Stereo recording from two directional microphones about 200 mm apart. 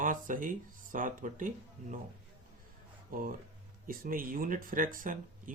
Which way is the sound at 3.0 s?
45° right (ahead or behind).